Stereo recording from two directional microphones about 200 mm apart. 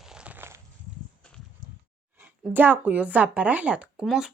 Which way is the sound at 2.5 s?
10° right (ahead or behind).